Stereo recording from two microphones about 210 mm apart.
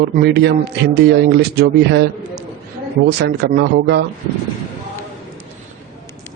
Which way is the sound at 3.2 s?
50° right (ahead or behind).